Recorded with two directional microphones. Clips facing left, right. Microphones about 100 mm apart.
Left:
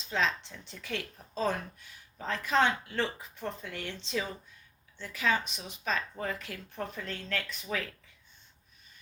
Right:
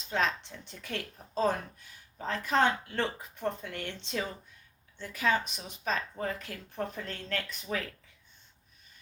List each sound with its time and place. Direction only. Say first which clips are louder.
0.8 s speech: left 1 dB; 45° right (ahead or behind)